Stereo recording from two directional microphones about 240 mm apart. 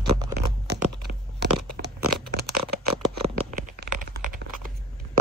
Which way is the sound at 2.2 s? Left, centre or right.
Right.